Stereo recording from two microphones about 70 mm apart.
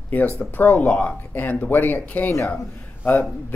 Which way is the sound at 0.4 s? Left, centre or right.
Left.